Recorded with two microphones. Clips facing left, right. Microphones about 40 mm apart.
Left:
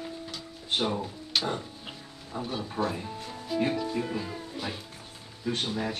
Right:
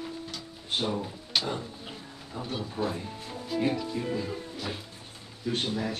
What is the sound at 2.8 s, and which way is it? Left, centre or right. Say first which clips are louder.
Speech: left 1 dB; left.